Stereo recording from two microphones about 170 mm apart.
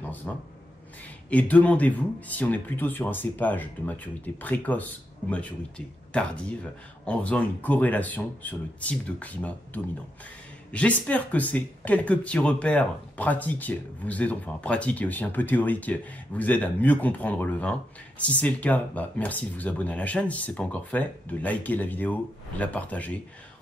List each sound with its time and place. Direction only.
0.0 s a sound: 10° left (ahead or behind)
1.3 s speech: 10° left (ahead or behind)
10.7 s speech: 10° left (ahead or behind)